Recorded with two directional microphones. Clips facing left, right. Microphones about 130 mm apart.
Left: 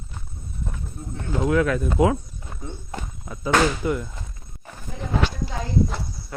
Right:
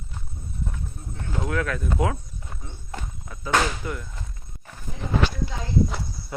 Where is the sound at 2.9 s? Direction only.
15° left (ahead or behind).